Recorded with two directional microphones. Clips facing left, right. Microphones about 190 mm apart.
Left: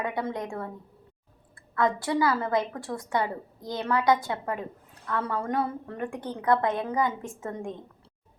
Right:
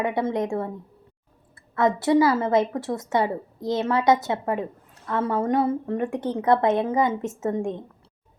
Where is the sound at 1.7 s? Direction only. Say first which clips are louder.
Right 6 dB; 25° right (ahead or behind).